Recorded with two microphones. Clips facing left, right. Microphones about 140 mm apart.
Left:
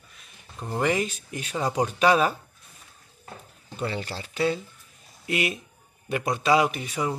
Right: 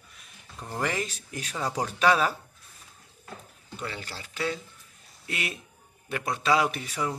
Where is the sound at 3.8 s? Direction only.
30° left (ahead or behind).